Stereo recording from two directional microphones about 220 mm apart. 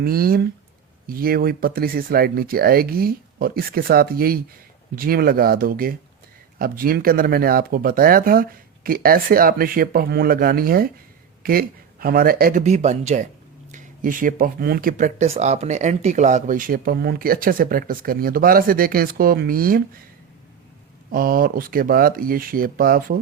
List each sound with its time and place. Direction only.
0.0 s speech: 40° right (ahead or behind)
21.1 s speech: 40° right (ahead or behind)